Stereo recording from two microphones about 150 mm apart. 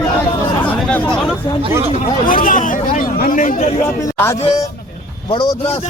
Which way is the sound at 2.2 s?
65° left (ahead or behind).